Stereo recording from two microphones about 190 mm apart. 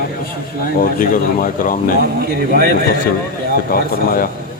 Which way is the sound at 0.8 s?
45° left (ahead or behind).